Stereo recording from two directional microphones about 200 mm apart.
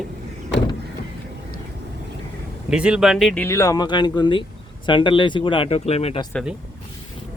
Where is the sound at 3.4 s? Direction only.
15° left (ahead or behind); by 6.2 s 30° left (ahead or behind).